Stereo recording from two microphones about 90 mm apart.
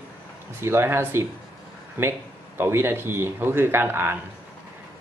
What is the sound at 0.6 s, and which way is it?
Speech, 30° right (ahead or behind).